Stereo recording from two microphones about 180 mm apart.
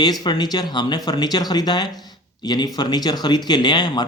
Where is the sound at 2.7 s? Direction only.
20° left (ahead or behind).